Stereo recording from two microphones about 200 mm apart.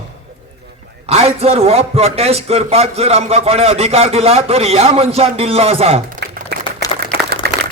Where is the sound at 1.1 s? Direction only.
30° right (ahead or behind).